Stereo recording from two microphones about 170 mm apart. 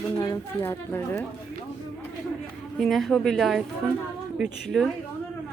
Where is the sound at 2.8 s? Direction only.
Centre (ahead or behind).